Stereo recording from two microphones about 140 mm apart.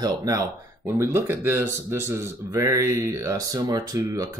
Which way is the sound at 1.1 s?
15° right (ahead or behind).